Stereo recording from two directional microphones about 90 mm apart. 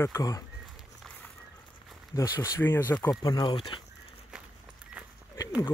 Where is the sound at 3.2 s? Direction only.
55° left (ahead or behind).